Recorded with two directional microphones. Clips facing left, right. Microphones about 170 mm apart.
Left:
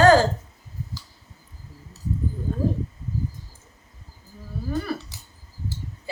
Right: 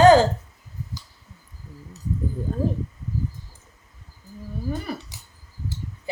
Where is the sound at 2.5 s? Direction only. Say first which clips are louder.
Even; 35° right (ahead or behind).